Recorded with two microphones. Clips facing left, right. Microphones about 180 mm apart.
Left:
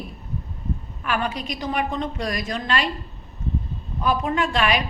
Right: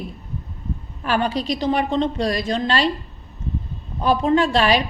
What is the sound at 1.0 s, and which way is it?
A woman's voice, 30° right (ahead or behind).